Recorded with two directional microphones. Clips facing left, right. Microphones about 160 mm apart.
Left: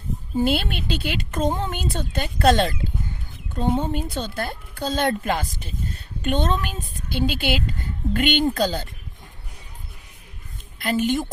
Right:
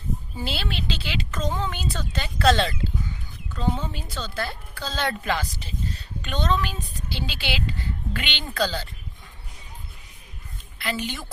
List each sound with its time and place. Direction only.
0.3 s speech: 55° left (ahead or behind)
10.8 s a woman's voice: 45° left (ahead or behind)